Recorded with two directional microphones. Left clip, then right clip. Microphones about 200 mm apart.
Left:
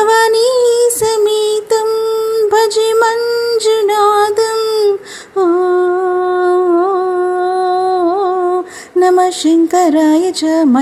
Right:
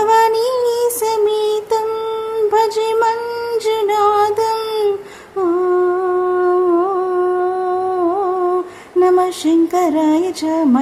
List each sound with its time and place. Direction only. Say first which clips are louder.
0.0 s child singing: left 3 dB; 25° left (ahead or behind)
1.0 s music: left 3 dB; 20° left (ahead or behind)
2.5 s a sound: left 2 dB; 20° left (ahead or behind)
3.7 s female singing: left 3 dB; 20° left (ahead or behind)
5.4 s humming: left 4 dB; 20° left (ahead or behind)
9.0 s mantra: left 3 dB; 20° left (ahead or behind)